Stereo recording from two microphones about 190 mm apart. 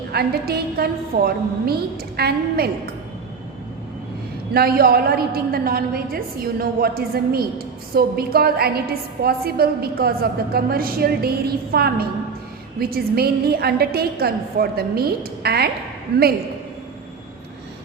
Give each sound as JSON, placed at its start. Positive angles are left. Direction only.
{"t": 0.1, "sound": "a woman's voice", "side_deg": -55}
{"t": 4.5, "sound": "a woman's voice", "side_deg": -50}